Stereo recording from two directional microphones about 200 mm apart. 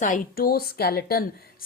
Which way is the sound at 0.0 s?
45° left (ahead or behind).